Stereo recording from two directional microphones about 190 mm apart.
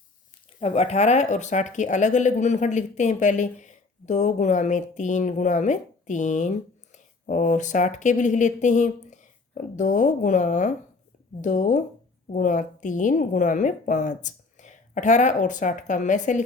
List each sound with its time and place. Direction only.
0.6 s speech: 35° left (ahead or behind)